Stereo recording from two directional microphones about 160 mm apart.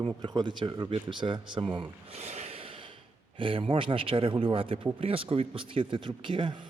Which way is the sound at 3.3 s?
35° right (ahead or behind).